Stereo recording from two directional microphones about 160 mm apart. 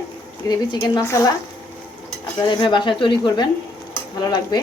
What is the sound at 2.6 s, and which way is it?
Speech, 30° left (ahead or behind).